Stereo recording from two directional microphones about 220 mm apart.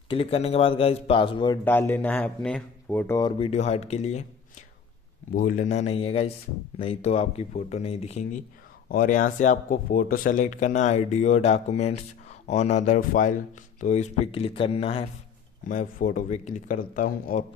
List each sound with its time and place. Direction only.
0.1 s speech: 25° left (ahead or behind)
1.6 s speech: 10° left (ahead or behind); by 4.2 s 30° left (ahead or behind)
5.3 s speech: 35° left (ahead or behind)
15.7 s speech: 35° left (ahead or behind)